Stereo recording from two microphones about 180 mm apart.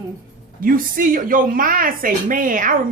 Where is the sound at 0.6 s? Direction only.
50° right (ahead or behind).